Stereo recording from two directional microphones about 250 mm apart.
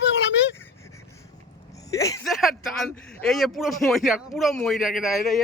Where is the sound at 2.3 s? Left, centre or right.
Centre.